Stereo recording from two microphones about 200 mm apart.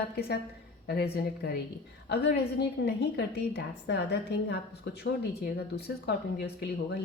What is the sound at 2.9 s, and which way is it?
A woman's voice, 55° left (ahead or behind).